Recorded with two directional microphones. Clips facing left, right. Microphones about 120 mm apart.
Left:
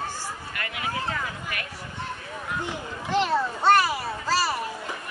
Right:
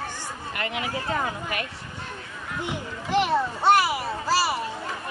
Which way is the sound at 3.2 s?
15° right (ahead or behind).